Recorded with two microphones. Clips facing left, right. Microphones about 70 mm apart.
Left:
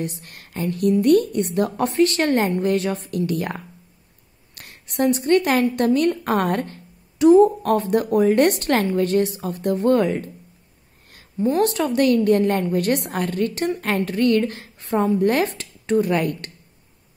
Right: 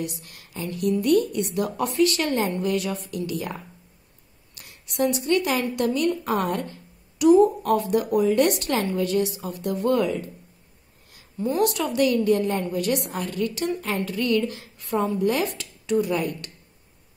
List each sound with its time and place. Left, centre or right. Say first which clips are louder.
0.0 s a woman's voice: left 3 dB; left
7.2 s a woman's voice: left 3 dB; left
11.3 s a woman's voice: left 4 dB; left
15.1 s speech: left 4 dB; left
16.1 s a woman's voice: left 4 dB; left